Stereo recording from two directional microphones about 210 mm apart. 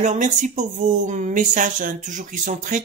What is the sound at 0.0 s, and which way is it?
Speech, 35° right (ahead or behind).